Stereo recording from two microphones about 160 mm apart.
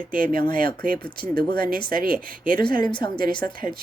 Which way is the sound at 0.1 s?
65° right (ahead or behind).